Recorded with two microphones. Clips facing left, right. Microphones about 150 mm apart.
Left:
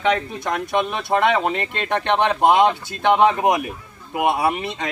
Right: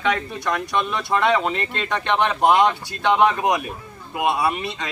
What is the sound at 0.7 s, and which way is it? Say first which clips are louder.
Speech: left 3 dB; 20° left (ahead or behind).